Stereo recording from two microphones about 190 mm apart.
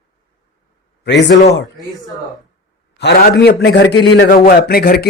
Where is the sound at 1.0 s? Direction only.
65° left (ahead or behind).